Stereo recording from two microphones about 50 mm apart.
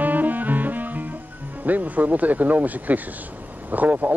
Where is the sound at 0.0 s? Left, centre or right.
Right.